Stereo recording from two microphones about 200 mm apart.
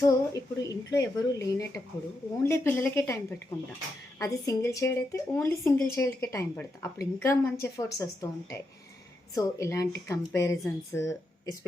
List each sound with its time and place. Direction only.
0.0 s a woman's voice: 15° left (ahead or behind)